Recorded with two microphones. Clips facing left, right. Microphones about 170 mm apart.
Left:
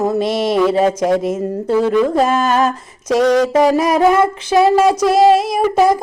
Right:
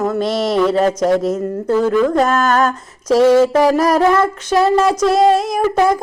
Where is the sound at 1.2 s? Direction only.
25° left (ahead or behind).